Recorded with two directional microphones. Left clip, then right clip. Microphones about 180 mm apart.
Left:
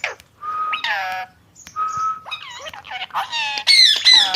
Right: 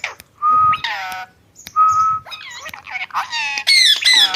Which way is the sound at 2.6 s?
30° left (ahead or behind).